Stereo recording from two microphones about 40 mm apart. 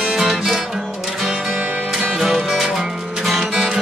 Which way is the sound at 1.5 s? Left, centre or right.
Right.